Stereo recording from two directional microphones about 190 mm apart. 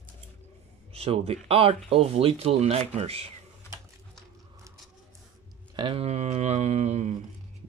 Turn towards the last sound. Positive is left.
turn(degrees=-35)  # may be behind; listen again after turning